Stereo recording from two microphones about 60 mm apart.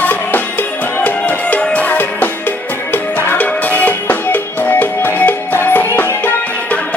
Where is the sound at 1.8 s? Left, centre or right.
Left.